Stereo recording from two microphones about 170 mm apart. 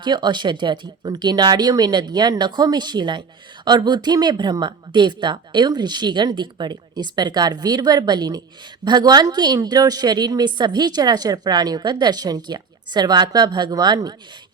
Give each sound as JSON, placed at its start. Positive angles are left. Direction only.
{"t": 0.0, "sound": "speech", "side_deg": -25}